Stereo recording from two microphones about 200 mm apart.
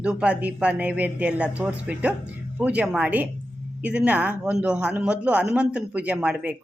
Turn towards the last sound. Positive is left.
turn(degrees=-5)  # may be behind; listen again after turning